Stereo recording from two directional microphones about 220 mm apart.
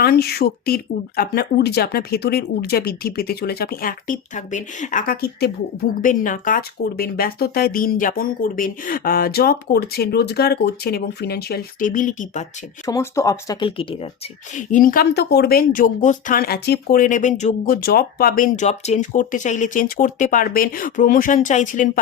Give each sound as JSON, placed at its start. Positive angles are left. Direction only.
{"t": 0.0, "sound": "speech", "side_deg": 45}
{"t": 12.8, "sound": "speech", "side_deg": 15}
{"t": 14.5, "sound": "speech", "side_deg": 35}